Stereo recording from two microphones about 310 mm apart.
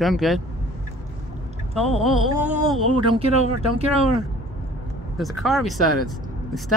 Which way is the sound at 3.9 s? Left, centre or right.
Centre.